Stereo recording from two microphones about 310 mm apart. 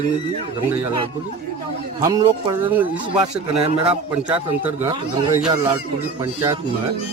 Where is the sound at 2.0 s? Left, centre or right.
Centre.